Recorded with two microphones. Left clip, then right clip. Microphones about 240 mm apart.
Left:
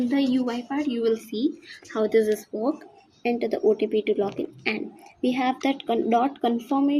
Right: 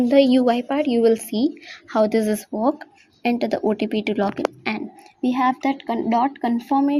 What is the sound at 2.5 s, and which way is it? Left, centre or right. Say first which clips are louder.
Speech: right 5 dB; right.